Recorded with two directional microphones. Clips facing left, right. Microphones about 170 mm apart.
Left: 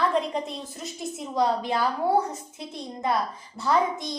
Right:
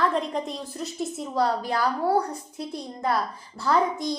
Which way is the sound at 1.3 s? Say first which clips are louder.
Even; 20° left (ahead or behind).